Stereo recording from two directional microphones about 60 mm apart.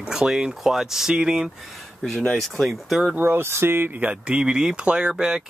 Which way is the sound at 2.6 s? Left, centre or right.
Centre.